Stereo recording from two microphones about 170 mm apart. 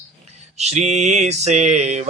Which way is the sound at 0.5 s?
40° right (ahead or behind).